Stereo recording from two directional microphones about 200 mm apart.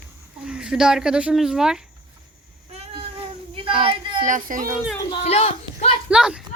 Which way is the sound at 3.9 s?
40° right (ahead or behind).